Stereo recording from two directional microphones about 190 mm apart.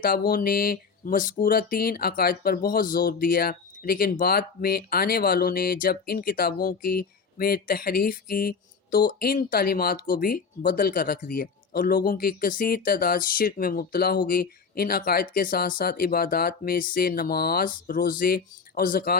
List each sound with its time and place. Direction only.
0.0 s speech: 50° left (ahead or behind)